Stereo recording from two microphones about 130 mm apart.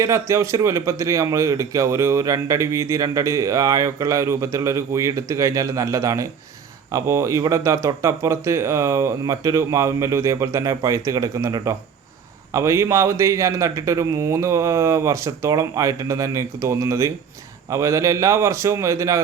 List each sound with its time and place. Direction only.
0.0 s a man's voice: 25° right (ahead or behind)